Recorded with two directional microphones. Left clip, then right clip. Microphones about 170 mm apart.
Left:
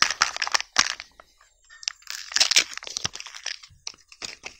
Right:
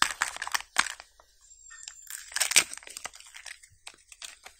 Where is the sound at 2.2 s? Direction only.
15° left (ahead or behind).